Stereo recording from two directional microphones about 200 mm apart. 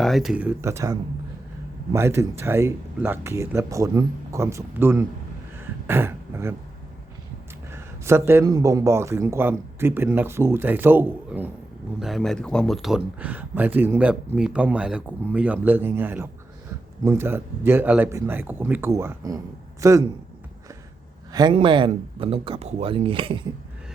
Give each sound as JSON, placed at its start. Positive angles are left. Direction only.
{"t": 0.0, "sound": "speech", "side_deg": 0}
{"t": 7.7, "sound": "speech", "side_deg": -10}
{"t": 21.3, "sound": "speech", "side_deg": -25}